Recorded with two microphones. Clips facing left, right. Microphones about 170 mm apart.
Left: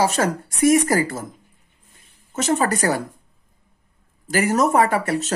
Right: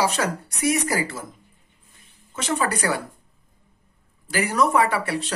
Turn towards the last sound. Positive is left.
turn(degrees=45)  # may be behind; listen again after turning